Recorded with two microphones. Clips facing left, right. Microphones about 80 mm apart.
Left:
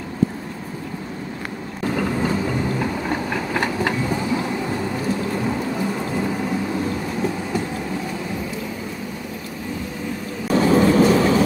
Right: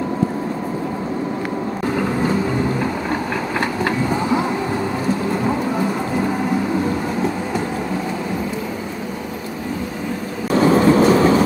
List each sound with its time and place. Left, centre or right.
10.5 s vehicle: centre